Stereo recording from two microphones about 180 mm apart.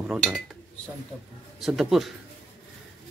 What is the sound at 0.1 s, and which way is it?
Speech, centre (ahead or behind).